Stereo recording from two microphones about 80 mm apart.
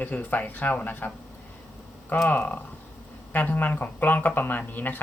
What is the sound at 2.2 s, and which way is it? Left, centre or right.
Speech, left.